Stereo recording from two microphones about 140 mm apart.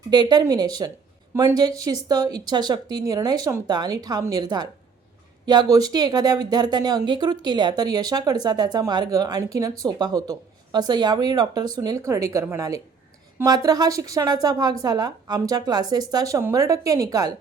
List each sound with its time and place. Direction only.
0.1 s speech: 30° right (ahead or behind)